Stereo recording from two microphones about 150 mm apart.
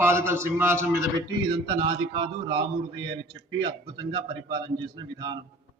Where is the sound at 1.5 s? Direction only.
30° right (ahead or behind).